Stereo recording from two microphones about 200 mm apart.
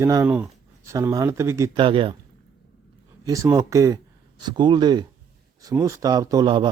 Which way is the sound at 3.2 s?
15° right (ahead or behind).